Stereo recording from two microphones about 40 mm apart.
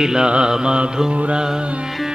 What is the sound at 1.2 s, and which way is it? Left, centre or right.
Carnatic music, right.